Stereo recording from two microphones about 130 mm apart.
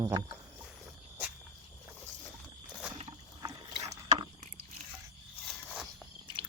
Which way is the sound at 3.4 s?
25° right (ahead or behind).